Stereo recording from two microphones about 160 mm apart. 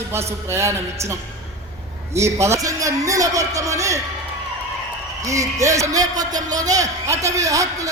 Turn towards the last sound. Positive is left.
turn(degrees=-20)  # may be behind; listen again after turning